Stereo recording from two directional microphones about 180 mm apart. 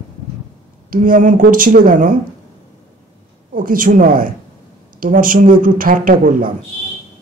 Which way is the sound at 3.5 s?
50° right (ahead or behind).